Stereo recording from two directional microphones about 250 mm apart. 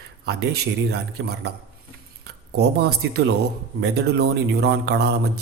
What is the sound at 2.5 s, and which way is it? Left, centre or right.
A man's voice, right.